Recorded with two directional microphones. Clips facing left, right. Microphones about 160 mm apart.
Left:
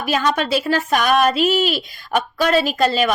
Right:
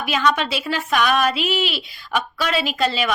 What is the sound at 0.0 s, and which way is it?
Speech, 40° left (ahead or behind).